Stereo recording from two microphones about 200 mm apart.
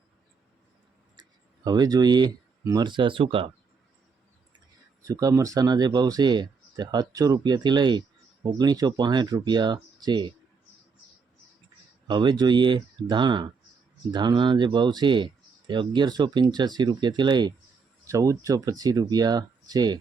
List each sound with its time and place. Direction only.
1.6 s speech: 20° right (ahead or behind)
5.0 s speech: 15° right (ahead or behind)
12.0 s speech: 20° right (ahead or behind)